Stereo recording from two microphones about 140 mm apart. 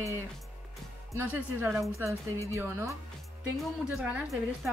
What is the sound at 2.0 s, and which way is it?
Speech, 20° right (ahead or behind).